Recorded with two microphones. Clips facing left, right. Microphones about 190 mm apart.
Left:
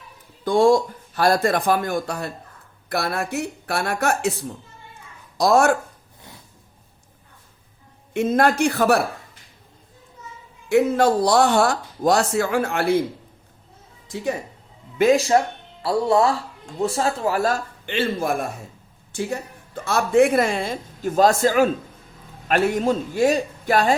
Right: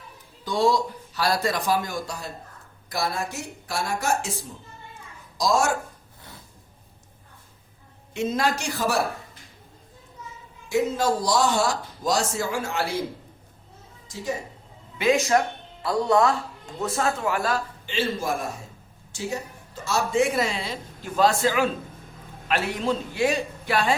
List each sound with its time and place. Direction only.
0.4 s speech: 50° left (ahead or behind)
8.1 s speech: 55° left (ahead or behind)
10.7 s speech: 60° left (ahead or behind)
14.1 s speech: 60° left (ahead or behind)
14.9 s speech: 40° left (ahead or behind)
17.8 s speech: 60° left (ahead or behind)